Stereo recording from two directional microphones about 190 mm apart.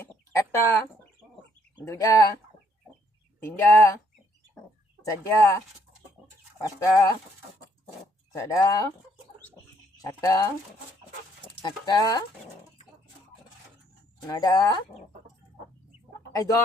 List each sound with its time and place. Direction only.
0.3 s speech: 15° left (ahead or behind)
3.4 s speech: 10° left (ahead or behind)
5.0 s speech: 15° left (ahead or behind)
8.3 s speech: 15° left (ahead or behind)
10.0 s speech: 20° left (ahead or behind)
14.3 s speech: 20° left (ahead or behind)
16.3 s speech: 20° left (ahead or behind)